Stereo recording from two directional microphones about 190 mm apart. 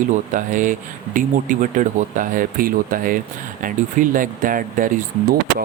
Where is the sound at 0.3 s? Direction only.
45° right (ahead or behind).